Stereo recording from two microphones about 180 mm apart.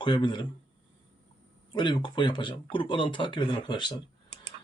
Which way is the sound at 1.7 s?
25° left (ahead or behind).